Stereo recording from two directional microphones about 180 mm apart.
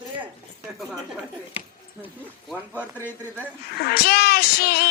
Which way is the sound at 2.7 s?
10° left (ahead or behind).